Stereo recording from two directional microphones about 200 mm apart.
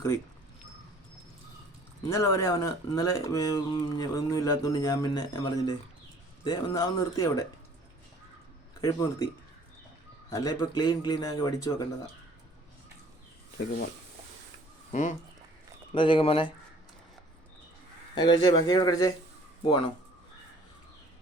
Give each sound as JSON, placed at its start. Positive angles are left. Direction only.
{"t": 2.1, "sound": "a man's voice", "side_deg": 15}
{"t": 8.8, "sound": "a man's voice", "side_deg": 20}
{"t": 15.9, "sound": "a man's voice", "side_deg": 25}
{"t": 18.1, "sound": "a man's voice", "side_deg": 20}